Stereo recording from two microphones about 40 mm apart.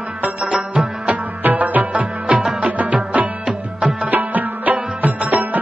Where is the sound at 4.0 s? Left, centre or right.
Right.